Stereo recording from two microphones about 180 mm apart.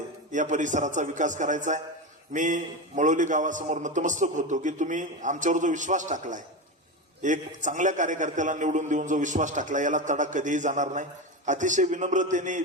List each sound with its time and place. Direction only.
0.3 s a man's voice: 45° right (ahead or behind)